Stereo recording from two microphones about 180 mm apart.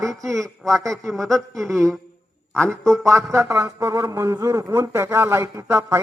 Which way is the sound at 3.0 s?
15° right (ahead or behind).